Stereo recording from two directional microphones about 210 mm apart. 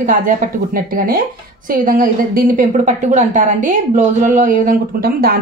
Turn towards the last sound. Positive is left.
turn(degrees=-40)  # may be behind; listen again after turning